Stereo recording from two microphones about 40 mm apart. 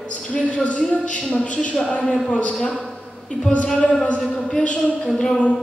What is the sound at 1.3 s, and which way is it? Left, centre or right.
A woman's voice, left.